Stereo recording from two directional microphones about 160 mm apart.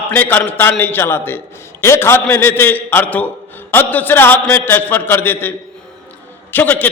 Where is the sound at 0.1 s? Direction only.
10° left (ahead or behind).